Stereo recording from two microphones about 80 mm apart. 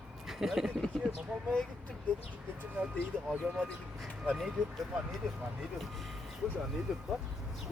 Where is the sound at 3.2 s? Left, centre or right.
Centre.